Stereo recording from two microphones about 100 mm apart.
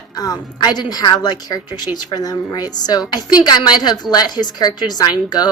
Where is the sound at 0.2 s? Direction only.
40° left (ahead or behind).